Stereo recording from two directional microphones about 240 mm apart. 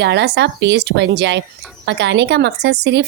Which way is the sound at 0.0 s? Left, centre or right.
Right.